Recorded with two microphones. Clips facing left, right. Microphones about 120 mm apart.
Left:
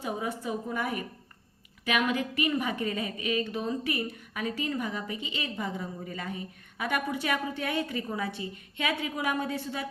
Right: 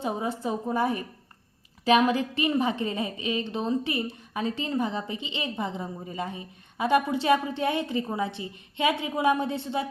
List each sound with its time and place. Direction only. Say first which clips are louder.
0.0 s a woman's voice: right 4 dB; 30° right (ahead or behind)